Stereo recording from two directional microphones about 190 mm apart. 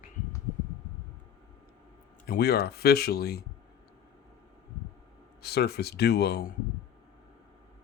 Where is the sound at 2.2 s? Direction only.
55° left (ahead or behind).